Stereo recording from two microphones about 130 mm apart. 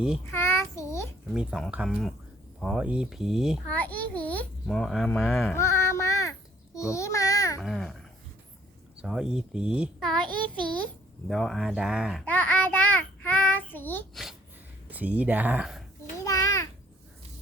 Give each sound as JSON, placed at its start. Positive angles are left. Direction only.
{"t": 0.3, "sound": "a sound", "side_deg": 20}
{"t": 1.3, "sound": "speech", "side_deg": -5}
{"t": 3.8, "sound": "a child's voice", "side_deg": 10}
{"t": 5.5, "sound": "a sound", "side_deg": 20}
{"t": 6.7, "sound": "babbling", "side_deg": 25}
{"t": 7.6, "sound": "speech", "side_deg": 0}
{"t": 9.0, "sound": "speech", "side_deg": -5}
{"t": 11.3, "sound": "speech", "side_deg": 0}
{"t": 12.2, "sound": "child singing", "side_deg": 10}
{"t": 14.8, "sound": "speech", "side_deg": -10}
{"t": 16.2, "sound": "a sound", "side_deg": 25}